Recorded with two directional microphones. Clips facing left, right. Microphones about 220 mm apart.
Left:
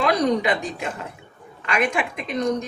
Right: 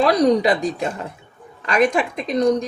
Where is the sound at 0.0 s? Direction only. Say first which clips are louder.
Right 5 dB; 35° right (ahead or behind).